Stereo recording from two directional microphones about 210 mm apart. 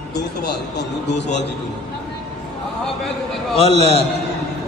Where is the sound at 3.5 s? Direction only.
30° left (ahead or behind).